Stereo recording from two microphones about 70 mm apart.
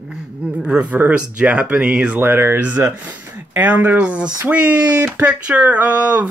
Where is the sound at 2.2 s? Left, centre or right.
Right.